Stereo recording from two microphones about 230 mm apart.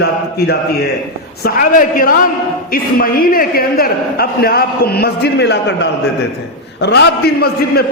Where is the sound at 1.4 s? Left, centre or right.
Left.